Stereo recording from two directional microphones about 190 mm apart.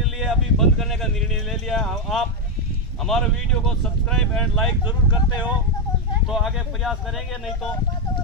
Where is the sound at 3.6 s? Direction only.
5° left (ahead or behind).